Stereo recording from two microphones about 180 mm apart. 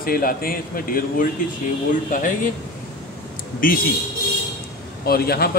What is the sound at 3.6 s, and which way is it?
Speech, 50° left (ahead or behind).